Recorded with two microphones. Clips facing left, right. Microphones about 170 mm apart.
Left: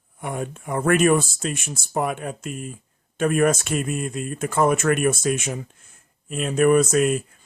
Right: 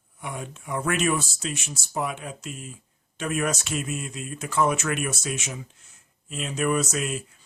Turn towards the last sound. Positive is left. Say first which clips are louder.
# left 9 dB
turn(degrees=50)  # may be behind; listen again after turning